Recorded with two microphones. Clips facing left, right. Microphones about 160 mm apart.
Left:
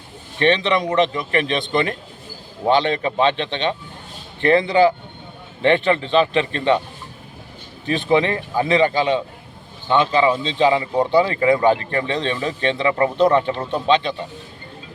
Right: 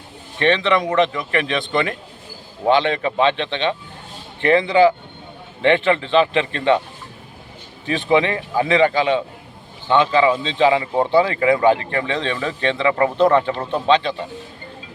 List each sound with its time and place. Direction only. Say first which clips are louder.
0.3 s speech: even; 30° left (ahead or behind)
7.9 s speech: even; 35° left (ahead or behind)
10.9 s speech: even; 25° right (ahead or behind)
11.2 s speech: even; 35° left (ahead or behind)
13.2 s speech: right 1 dB; 25° left (ahead or behind)